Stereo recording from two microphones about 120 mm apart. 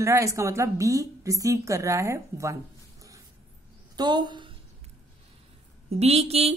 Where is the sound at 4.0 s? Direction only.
40° right (ahead or behind).